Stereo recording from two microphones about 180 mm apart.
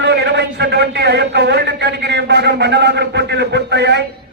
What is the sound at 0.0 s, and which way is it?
A man's voice, 70° right (ahead or behind).